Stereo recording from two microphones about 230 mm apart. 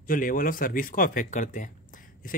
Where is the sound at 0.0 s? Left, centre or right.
Left.